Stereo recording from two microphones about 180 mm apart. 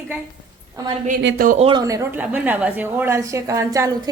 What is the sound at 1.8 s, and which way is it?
A woman's voice, 15° right (ahead or behind).